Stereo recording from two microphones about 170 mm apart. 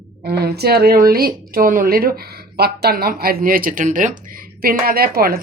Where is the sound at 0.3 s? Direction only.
70° right (ahead or behind).